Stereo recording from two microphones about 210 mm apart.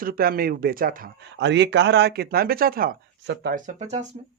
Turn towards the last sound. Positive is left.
turn(degrees=-35)  # may be behind; listen again after turning